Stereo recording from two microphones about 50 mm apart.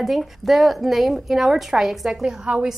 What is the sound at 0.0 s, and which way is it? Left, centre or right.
A woman's voice, centre.